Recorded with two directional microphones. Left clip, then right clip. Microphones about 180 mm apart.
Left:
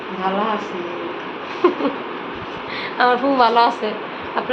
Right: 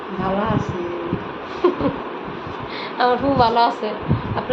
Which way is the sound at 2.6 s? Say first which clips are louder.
Left 2 dB; 10° left (ahead or behind).